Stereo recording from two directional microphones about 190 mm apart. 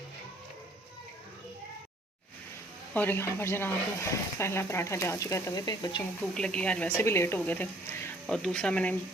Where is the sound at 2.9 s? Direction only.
10° left (ahead or behind).